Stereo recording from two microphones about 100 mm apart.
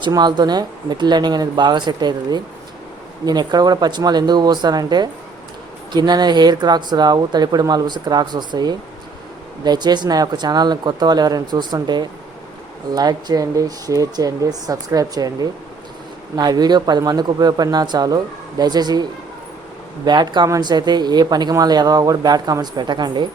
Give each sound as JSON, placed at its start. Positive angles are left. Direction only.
{"t": 0.1, "sound": "speech", "side_deg": -45}
{"t": 20.1, "sound": "speech", "side_deg": -45}